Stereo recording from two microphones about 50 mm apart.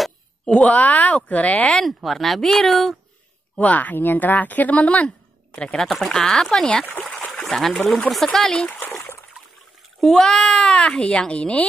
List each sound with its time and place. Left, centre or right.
0.7 s speech: left
2.0 s speech: centre
3.5 s speech: left
5.8 s speech: centre
9.9 s a child's voice: centre; by 11.6 s left